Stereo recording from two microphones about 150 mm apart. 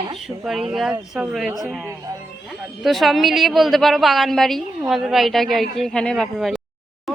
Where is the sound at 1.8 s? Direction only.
20° right (ahead or behind).